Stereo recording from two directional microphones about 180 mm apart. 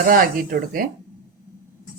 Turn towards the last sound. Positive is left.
turn(degrees=-55)  # may be behind; listen again after turning